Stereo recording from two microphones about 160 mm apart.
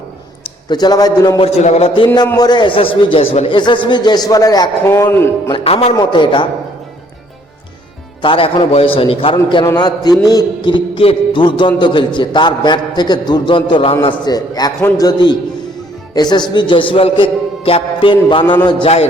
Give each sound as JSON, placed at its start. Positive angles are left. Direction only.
{"t": 0.4, "sound": "a man's voice", "side_deg": 25}
{"t": 1.4, "sound": "a man's voice", "side_deg": 45}
{"t": 2.1, "sound": "a man's voice", "side_deg": 25}
{"t": 5.6, "sound": "a man's voice", "side_deg": 40}
{"t": 8.2, "sound": "a man's voice", "side_deg": 30}